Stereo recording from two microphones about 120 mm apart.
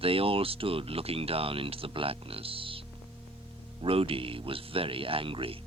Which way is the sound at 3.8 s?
50° right (ahead or behind).